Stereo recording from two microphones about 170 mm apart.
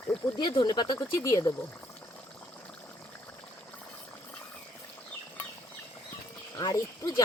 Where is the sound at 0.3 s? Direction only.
25° left (ahead or behind).